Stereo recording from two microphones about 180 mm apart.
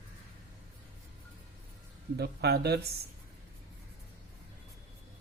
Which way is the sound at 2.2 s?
65° right (ahead or behind).